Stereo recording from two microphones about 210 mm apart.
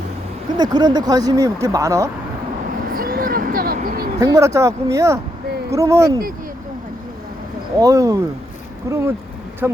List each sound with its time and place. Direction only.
0.5 s speech: 20° right (ahead or behind)
2.9 s a sound: 45° right (ahead or behind)
4.2 s speech: 15° right (ahead or behind)
7.8 s speech: 15° right (ahead or behind)